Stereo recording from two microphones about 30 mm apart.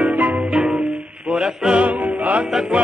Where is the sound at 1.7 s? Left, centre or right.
Right.